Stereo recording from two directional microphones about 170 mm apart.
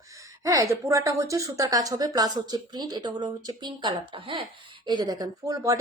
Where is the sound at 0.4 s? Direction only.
20° right (ahead or behind).